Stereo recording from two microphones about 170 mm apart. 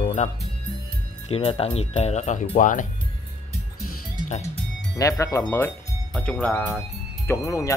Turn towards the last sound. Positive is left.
turn(degrees=20)  # may be behind; listen again after turning